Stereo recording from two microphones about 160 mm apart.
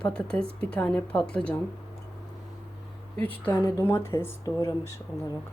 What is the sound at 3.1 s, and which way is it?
Speech, 10° left (ahead or behind).